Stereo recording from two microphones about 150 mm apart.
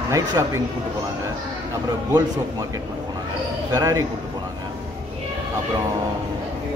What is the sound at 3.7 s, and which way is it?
Speech, 20° right (ahead or behind).